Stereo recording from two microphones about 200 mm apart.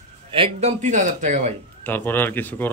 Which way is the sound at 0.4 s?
35° right (ahead or behind).